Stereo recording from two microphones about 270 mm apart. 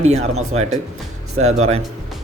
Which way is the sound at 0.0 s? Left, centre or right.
Right.